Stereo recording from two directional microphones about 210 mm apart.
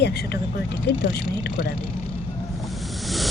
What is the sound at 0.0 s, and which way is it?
Speech, 50° left (ahead or behind).